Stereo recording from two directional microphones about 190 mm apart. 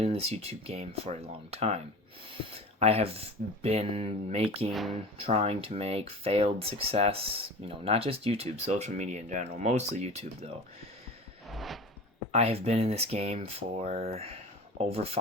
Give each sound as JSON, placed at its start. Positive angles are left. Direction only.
{"t": 0.0, "sound": "speech", "side_deg": -30}
{"t": 4.7, "sound": "speech", "side_deg": 0}
{"t": 5.1, "sound": "speech", "side_deg": -30}
{"t": 11.4, "sound": "a sound", "side_deg": 0}
{"t": 12.3, "sound": "speech", "side_deg": -35}